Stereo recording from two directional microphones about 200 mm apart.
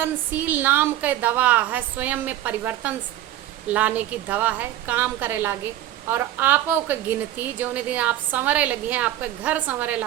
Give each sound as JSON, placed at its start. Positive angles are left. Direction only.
{"t": 0.0, "sound": "a woman's voice", "side_deg": -10}